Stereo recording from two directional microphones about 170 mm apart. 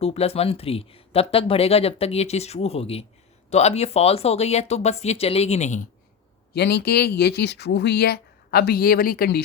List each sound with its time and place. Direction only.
0.0 s speech: 35° left (ahead or behind)
6.5 s speech: 75° left (ahead or behind)